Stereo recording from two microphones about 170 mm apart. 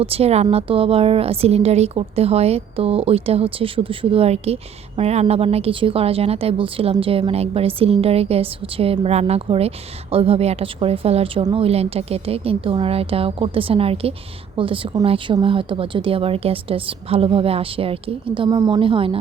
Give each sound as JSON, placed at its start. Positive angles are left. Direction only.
{"t": 0.0, "sound": "a woman's voice", "side_deg": -35}